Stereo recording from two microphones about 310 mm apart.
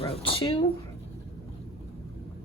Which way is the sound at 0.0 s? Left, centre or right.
Centre.